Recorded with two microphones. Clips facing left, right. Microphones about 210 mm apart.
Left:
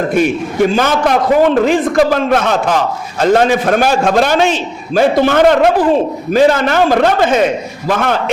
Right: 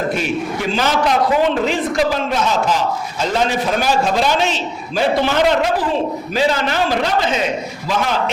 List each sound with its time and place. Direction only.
0.1 s a man's voice: 50° left (ahead or behind)